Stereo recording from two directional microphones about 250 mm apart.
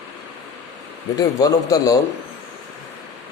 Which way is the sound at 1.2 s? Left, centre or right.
Centre.